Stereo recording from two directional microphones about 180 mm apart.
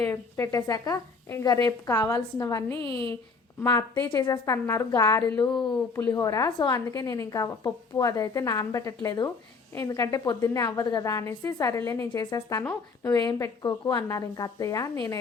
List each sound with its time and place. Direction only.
0.0 s a woman's voice: 15° left (ahead or behind)
2.6 s a woman's voice: 30° right (ahead or behind)
3.6 s a woman's voice: 15° left (ahead or behind)